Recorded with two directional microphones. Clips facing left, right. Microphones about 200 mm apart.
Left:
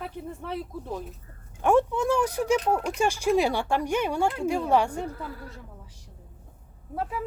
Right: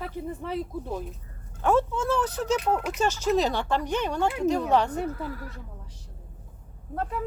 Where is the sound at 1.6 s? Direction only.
15° left (ahead or behind).